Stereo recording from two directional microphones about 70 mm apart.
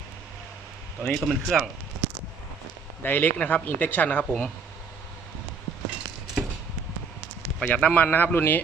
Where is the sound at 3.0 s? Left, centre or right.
Left.